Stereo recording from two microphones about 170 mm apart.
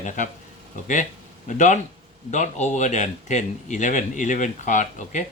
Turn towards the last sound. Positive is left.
turn(degrees=45)  # may be behind; listen again after turning